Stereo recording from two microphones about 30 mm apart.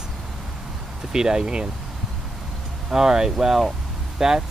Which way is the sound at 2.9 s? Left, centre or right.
Centre.